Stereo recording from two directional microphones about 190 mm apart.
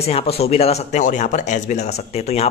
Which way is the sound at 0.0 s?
30° left (ahead or behind).